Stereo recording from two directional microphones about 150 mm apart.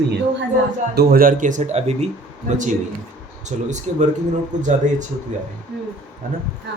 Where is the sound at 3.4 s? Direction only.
50° right (ahead or behind).